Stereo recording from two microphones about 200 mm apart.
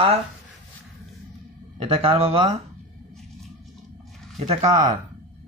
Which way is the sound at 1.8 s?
30° right (ahead or behind).